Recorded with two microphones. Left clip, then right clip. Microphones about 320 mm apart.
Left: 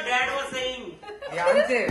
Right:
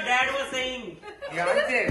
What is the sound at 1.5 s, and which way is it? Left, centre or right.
Speech, left.